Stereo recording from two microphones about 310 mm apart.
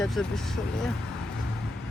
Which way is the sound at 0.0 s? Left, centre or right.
Centre.